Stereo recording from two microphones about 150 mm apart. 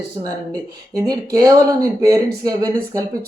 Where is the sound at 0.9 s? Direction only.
25° right (ahead or behind).